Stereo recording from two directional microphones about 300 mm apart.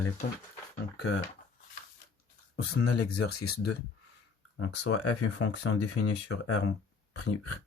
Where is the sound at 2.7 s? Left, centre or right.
Left.